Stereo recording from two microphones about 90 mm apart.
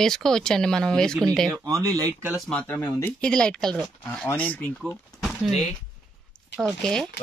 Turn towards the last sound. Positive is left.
turn(degrees=5)  # may be behind; listen again after turning